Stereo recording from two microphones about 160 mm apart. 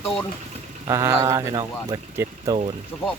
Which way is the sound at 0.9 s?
20° right (ahead or behind).